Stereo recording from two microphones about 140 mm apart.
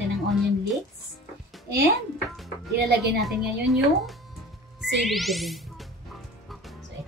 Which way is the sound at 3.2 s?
Centre (ahead or behind).